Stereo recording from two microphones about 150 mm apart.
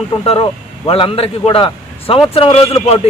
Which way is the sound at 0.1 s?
35° left (ahead or behind).